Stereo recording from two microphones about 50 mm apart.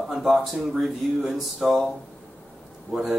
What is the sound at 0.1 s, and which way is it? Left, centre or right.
Speech, centre.